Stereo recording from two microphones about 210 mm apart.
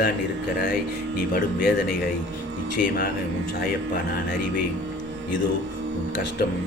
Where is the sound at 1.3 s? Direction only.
40° left (ahead or behind).